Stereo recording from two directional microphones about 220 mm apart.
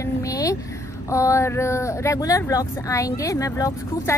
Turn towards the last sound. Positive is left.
turn(degrees=15)  # may be behind; listen again after turning